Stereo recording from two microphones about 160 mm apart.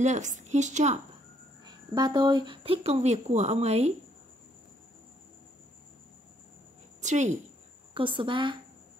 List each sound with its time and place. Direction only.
0.0 s a woman's voice: 50° right (ahead or behind)
1.6 s speech: 25° right (ahead or behind); by 3.9 s 45° right (ahead or behind)
7.0 s a woman's voice: 50° right (ahead or behind)
7.9 s speech: 35° right (ahead or behind)